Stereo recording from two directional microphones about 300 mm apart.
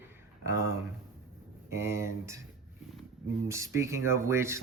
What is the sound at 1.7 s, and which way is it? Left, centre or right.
Speech, centre.